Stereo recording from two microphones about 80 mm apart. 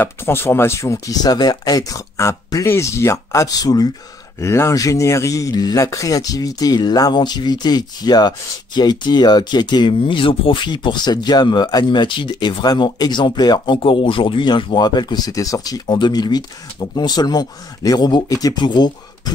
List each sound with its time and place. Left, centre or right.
0.0 s speech: left
1.1 s speech: left
4.4 s speech: left
16.0 s speech: left
18.6 s speech: left